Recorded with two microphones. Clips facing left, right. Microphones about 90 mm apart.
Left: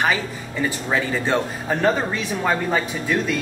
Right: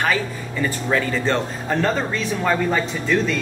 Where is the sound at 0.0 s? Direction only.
15° left (ahead or behind).